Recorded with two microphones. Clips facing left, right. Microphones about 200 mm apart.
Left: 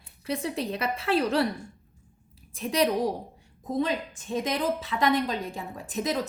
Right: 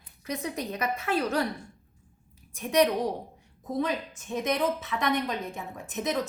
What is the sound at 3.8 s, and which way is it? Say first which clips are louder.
A woman's voice: left 2 dB; 30° left (ahead or behind).